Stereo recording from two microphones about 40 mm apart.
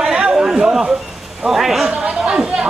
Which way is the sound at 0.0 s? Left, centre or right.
Centre.